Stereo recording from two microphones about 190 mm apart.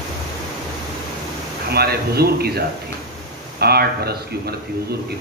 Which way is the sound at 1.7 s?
55° right (ahead or behind).